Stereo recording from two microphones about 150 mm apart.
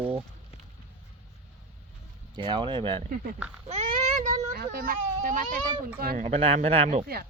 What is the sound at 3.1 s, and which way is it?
Speech, 70° right (ahead or behind).